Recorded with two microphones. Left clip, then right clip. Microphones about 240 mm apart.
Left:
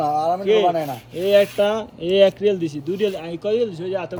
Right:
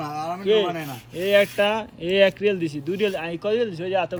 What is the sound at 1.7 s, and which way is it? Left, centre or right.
A man's voice, centre.